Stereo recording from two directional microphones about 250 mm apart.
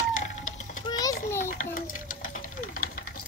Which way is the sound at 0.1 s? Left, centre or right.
Left.